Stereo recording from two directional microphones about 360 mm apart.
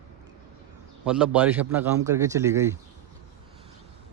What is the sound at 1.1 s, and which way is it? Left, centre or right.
A man's voice, centre.